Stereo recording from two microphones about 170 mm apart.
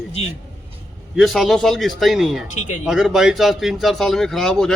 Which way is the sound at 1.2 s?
Centre (ahead or behind).